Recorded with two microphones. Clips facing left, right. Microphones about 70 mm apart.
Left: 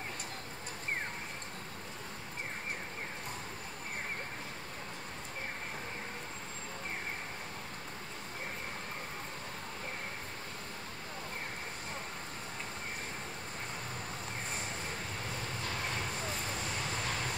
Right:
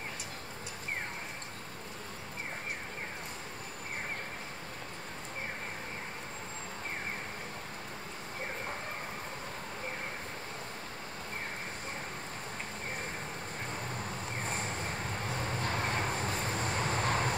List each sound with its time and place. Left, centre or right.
15.6 s vehicle: right